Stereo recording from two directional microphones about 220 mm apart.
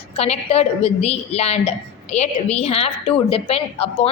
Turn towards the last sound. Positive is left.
turn(degrees=25)  # may be behind; listen again after turning